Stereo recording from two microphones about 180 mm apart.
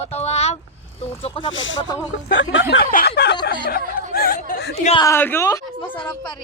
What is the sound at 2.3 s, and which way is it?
Speech, 90° left.